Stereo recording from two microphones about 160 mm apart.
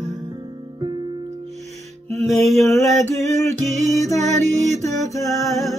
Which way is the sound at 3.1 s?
20° left (ahead or behind).